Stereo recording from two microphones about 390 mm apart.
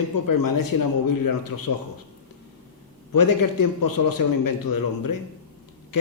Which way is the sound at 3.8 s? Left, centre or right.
Left.